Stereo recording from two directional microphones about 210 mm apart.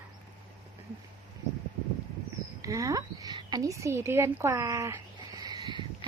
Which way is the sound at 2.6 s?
15° right (ahead or behind).